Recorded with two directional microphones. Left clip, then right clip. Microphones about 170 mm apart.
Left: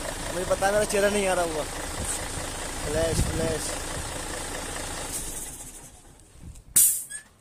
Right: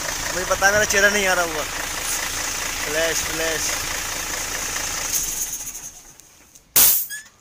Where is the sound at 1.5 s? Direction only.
15° left (ahead or behind).